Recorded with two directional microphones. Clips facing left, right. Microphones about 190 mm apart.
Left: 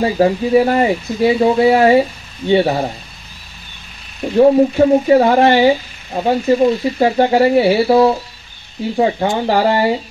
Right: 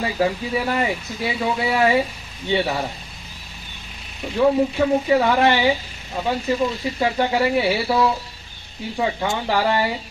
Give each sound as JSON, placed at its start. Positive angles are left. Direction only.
{"t": 0.0, "sound": "speech", "side_deg": 40}
{"t": 4.4, "sound": "speech", "side_deg": 40}